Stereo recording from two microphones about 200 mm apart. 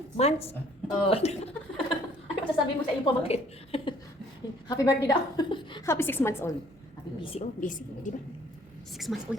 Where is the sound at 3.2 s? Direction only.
30° left (ahead or behind); by 6.5 s 10° left (ahead or behind).